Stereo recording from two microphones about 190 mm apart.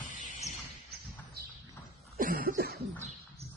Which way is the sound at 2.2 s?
50° right (ahead or behind).